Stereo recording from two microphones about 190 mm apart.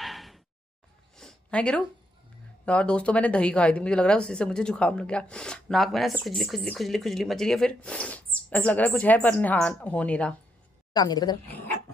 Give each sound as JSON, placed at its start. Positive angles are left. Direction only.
{"t": 0.0, "sound": "a sound", "side_deg": 0}
{"t": 2.6, "sound": "a woman's voice", "side_deg": 5}
{"t": 10.9, "sound": "a woman's voice", "side_deg": 20}
{"t": 11.4, "sound": "dog", "side_deg": 10}